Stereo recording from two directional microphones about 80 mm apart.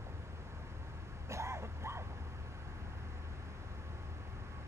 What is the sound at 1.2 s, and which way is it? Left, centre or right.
Vehicle, right.